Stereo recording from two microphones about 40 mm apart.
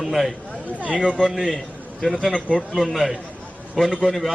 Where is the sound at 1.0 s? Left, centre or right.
Left.